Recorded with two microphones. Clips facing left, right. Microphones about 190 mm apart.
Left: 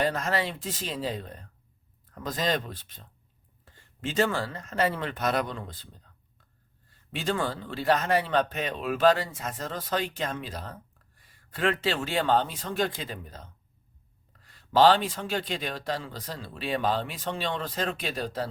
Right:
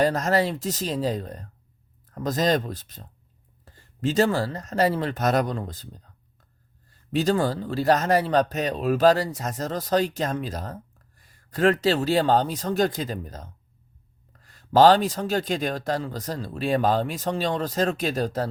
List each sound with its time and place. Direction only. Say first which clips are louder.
0.0 s speech: right 6 dB; 40° right (ahead or behind)
7.1 s speech: right 7 dB; 40° right (ahead or behind)